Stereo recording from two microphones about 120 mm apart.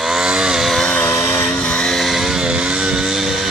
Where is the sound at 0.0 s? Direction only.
5° right (ahead or behind).